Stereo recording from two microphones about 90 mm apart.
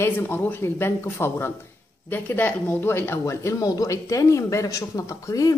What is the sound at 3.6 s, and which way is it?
Speech, 40° left (ahead or behind).